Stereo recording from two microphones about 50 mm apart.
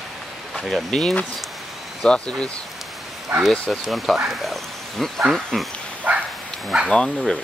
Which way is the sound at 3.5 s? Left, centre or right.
Centre.